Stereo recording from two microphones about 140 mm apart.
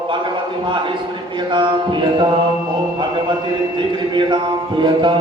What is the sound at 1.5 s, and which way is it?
Mantra, 35° right (ahead or behind).